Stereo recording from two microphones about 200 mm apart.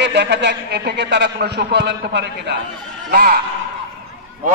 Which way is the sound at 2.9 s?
45° right (ahead or behind).